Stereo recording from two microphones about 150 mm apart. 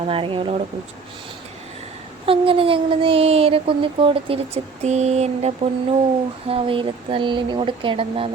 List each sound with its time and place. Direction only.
0.0 s speech: 35° right (ahead or behind)
2.2 s speech: 35° right (ahead or behind)